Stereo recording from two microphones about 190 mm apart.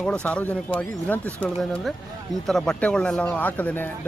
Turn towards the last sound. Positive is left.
turn(degrees=10)  # may be behind; listen again after turning